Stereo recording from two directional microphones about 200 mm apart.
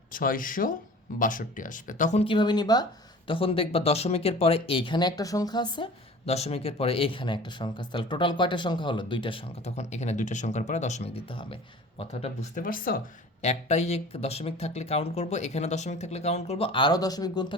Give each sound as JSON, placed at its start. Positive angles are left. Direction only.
{"t": 0.1, "sound": "speech", "side_deg": 45}
{"t": 13.4, "sound": "speech", "side_deg": 35}